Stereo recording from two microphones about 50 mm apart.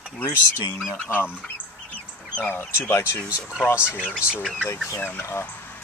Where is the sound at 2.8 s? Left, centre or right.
Left.